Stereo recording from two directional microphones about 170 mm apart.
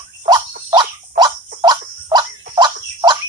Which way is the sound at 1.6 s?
25° right (ahead or behind).